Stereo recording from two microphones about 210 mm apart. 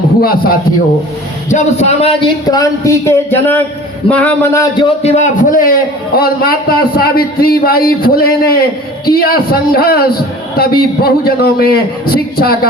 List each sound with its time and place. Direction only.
1.5 s a man's voice: 35° left (ahead or behind); by 4.9 s 15° left (ahead or behind)
5.0 s a man's voice: 35° left (ahead or behind)